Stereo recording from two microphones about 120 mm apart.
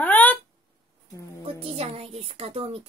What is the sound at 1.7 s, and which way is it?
A woman's voice, 60° right (ahead or behind).